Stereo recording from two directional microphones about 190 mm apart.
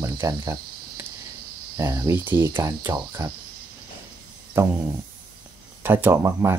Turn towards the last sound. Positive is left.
turn(degrees=-15)  # may be behind; listen again after turning